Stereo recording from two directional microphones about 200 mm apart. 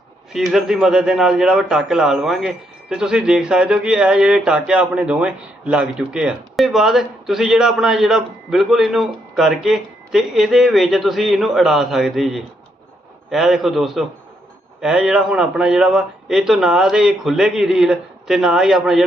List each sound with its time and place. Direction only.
0.3 s speech: centre (ahead or behind)